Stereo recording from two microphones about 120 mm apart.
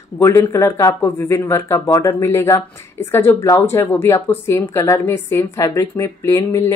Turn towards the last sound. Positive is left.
turn(degrees=25)  # may be behind; listen again after turning